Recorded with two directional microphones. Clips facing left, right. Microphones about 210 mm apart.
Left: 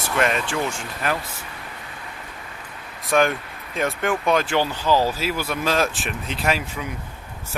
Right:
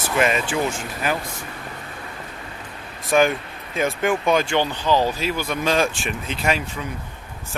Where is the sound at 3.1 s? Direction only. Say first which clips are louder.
Right 2 dB; centre (ahead or behind).